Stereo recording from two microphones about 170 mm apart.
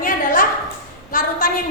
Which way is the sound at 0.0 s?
50° left (ahead or behind).